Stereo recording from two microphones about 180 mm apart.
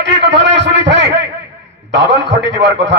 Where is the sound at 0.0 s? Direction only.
80° right.